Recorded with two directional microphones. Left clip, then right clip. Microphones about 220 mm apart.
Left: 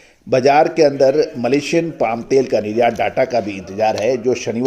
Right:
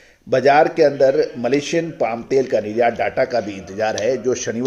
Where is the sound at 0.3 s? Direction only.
25° left (ahead or behind).